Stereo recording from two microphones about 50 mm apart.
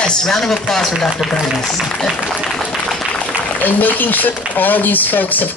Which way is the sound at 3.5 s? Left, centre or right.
Left.